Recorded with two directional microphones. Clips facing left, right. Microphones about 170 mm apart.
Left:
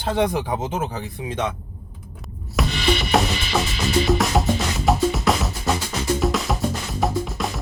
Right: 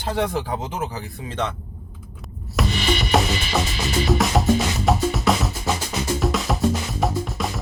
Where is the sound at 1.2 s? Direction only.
10° left (ahead or behind).